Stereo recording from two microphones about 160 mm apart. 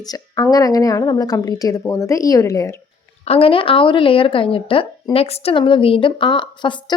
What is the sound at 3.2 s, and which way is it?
Speech, 35° left (ahead or behind).